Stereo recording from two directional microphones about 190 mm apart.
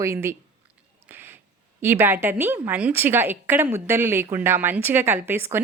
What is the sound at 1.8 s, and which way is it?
Speech, 10° right (ahead or behind).